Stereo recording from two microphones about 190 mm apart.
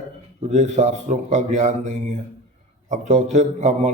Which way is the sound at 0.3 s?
35° right (ahead or behind).